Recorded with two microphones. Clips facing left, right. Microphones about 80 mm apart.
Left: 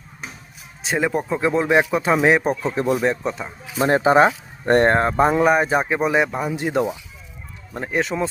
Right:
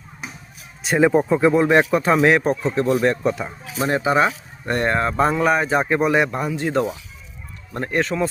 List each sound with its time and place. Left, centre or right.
0.9 s speech: centre
2.7 s speech: centre
3.0 s speech: centre
3.8 s speech: left; by 6.5 s centre
6.6 s speech: centre